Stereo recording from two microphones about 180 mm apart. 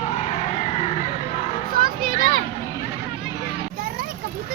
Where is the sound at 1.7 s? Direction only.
55° right (ahead or behind).